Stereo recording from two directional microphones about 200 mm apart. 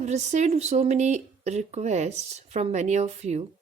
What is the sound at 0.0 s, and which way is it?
Speech, 35° right (ahead or behind).